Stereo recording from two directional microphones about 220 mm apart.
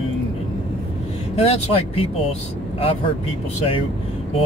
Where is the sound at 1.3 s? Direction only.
25° left (ahead or behind).